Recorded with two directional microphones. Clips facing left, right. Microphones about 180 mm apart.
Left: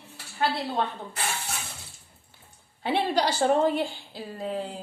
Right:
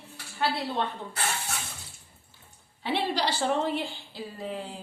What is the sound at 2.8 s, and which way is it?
A woman's voice, 50° left (ahead or behind).